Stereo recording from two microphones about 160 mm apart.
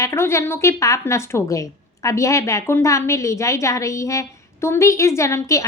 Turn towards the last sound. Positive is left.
turn(degrees=20)  # may be behind; listen again after turning